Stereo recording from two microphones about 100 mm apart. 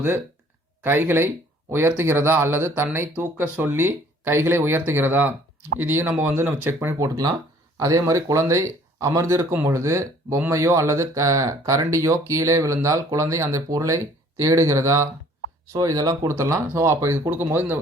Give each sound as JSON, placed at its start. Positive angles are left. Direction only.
{"t": 0.9, "sound": "speech", "side_deg": -20}
{"t": 7.8, "sound": "speech", "side_deg": -35}